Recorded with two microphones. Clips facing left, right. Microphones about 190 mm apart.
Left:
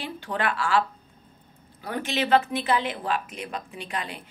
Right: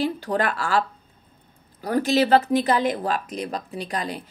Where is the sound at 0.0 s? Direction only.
40° right (ahead or behind).